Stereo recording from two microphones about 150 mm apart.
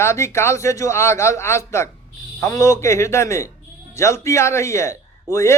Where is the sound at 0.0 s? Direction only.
20° left (ahead or behind).